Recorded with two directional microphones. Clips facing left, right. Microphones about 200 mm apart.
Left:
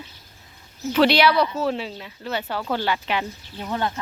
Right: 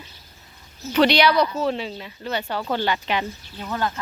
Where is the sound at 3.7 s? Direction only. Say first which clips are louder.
Even; 20° left (ahead or behind).